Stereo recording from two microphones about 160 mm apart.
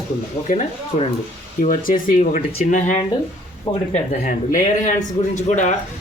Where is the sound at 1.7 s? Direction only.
60° left (ahead or behind).